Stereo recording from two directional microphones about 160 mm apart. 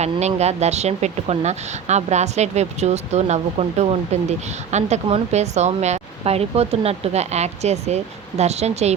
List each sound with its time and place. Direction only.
0.0 s speech: 45° right (ahead or behind)